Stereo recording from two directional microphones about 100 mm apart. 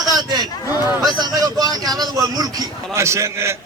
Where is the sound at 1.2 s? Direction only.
40° right (ahead or behind).